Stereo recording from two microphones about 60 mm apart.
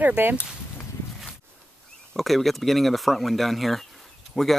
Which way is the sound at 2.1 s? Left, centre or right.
Centre.